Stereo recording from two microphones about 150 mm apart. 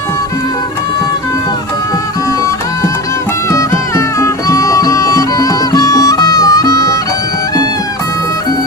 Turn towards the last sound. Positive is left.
turn(degrees=20)  # may be behind; listen again after turning